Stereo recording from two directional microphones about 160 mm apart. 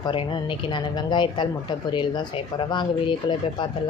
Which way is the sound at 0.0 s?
30° left (ahead or behind).